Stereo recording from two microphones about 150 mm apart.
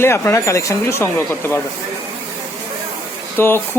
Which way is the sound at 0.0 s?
15° left (ahead or behind).